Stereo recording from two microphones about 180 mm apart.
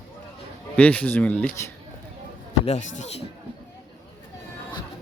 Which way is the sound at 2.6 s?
40° left (ahead or behind).